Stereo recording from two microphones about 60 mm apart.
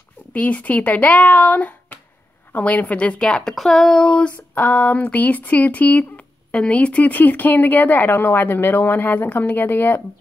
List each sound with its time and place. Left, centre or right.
0.3 s speech: left
4.6 s speech: left